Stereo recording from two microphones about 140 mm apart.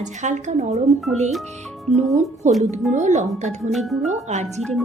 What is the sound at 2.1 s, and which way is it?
Speech, 55° right (ahead or behind).